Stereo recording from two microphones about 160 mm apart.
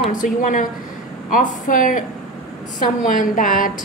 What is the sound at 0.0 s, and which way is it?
A woman's voice, 55° left (ahead or behind).